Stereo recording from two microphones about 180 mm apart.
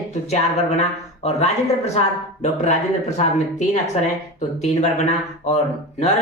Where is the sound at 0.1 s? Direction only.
40° left (ahead or behind).